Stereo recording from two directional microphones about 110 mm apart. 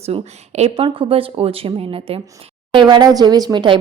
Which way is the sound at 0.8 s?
50° right (ahead or behind).